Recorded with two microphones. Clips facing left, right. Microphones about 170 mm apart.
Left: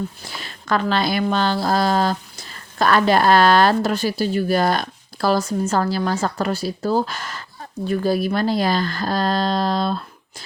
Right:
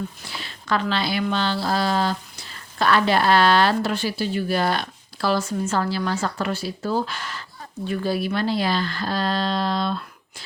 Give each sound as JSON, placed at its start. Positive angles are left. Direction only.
{"t": 0.3, "sound": "a woman's voice", "side_deg": 45}